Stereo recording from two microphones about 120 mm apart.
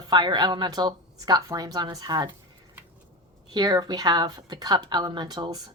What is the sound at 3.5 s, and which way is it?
Speech, 35° right (ahead or behind).